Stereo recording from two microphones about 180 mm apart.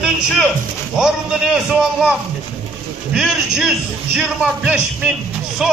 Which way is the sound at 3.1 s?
5° right (ahead or behind).